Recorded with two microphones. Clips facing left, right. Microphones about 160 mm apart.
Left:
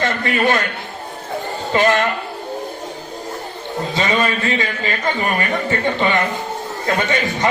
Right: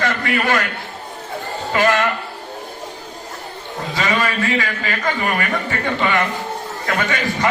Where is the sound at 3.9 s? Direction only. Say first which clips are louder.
Left 1 dB; 25° left (ahead or behind).